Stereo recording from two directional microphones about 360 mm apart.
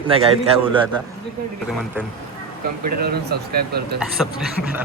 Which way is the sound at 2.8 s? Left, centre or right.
Right.